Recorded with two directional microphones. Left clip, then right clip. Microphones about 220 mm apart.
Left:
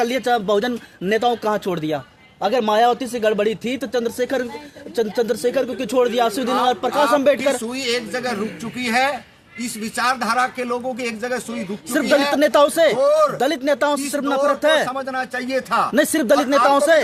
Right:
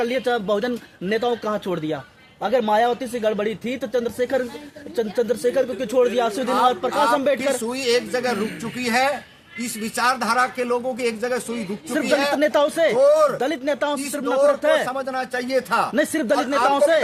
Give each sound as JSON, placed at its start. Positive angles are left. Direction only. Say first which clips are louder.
{"t": 0.0, "sound": "speech", "louder": "left 3 dB", "side_deg": 45}
{"t": 7.6, "sound": "a man's voice", "louder": "right 2 dB", "side_deg": -10}
{"t": 12.4, "sound": "speech", "louder": "left 4 dB", "side_deg": 50}
{"t": 13.0, "sound": "a man's voice", "louder": "right 4 dB", "side_deg": -10}
{"t": 13.4, "sound": "speech", "louder": "left 4 dB", "side_deg": 50}
{"t": 14.8, "sound": "a man's voice", "louder": "left 1 dB", "side_deg": -10}
{"t": 16.0, "sound": "speech", "louder": "left 4 dB", "side_deg": 50}